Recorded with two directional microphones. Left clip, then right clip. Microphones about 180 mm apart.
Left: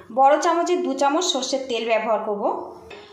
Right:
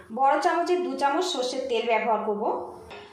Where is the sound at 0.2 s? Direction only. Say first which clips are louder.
Left 5 dB; 45° left (ahead or behind).